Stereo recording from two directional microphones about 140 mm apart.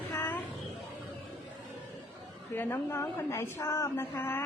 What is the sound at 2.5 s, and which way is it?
A woman's voice, 15° left (ahead or behind).